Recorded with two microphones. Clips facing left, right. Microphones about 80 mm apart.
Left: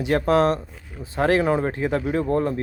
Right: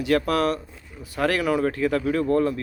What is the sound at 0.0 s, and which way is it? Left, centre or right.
Speech, left.